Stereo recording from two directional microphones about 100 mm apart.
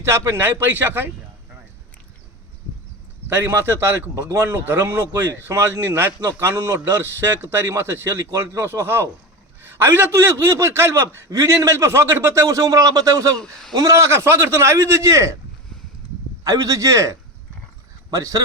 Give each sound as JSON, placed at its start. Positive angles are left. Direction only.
{"t": 0.0, "sound": "a man's voice", "side_deg": -25}
{"t": 3.2, "sound": "a man's voice", "side_deg": -20}
{"t": 13.4, "sound": "a man's voice", "side_deg": 5}
{"t": 13.7, "sound": "a man's voice", "side_deg": -35}
{"t": 16.4, "sound": "speech", "side_deg": -35}